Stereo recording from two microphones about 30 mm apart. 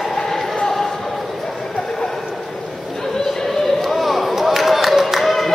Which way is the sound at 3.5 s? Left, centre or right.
Centre.